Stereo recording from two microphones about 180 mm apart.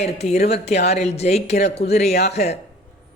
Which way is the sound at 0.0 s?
35° left (ahead or behind).